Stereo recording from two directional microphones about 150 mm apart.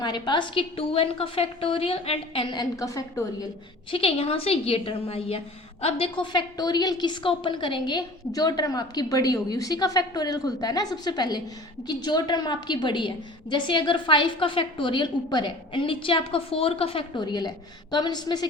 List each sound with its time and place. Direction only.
0.0 s a woman's voice: 30° left (ahead or behind)
3.9 s a woman's voice: 40° left (ahead or behind)